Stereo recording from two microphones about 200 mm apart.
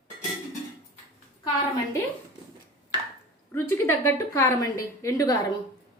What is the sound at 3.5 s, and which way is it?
A woman's voice, 15° left (ahead or behind).